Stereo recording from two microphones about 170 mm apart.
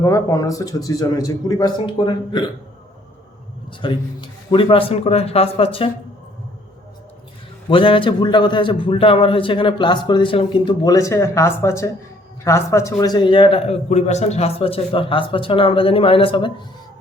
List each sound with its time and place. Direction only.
0.0 s a man's voice: 20° left (ahead or behind)
3.7 s a man's voice: 30° left (ahead or behind)
7.7 s a man's voice: 30° left (ahead or behind)